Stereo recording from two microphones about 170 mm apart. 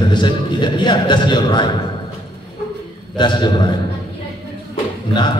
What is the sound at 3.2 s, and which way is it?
Speech, 25° left (ahead or behind).